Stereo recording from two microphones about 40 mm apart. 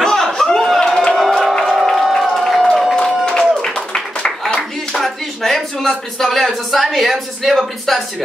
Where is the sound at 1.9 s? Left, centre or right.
Centre.